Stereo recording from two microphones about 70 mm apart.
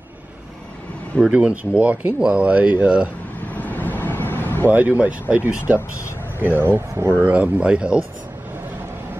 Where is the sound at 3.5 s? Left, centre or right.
Left.